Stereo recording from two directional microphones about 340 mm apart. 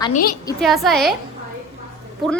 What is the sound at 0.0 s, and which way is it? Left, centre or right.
Speech, left.